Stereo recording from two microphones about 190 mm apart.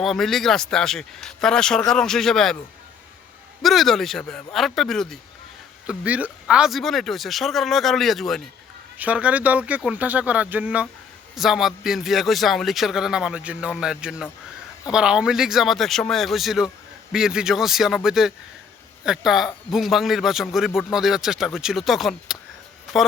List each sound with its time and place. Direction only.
0.0 s a man's voice: centre (ahead or behind)
3.6 s a man's voice: centre (ahead or behind)